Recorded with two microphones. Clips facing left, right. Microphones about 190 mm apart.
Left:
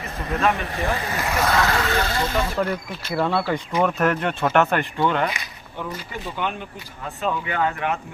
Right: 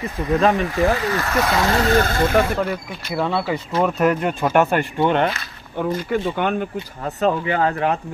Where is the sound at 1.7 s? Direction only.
40° right (ahead or behind).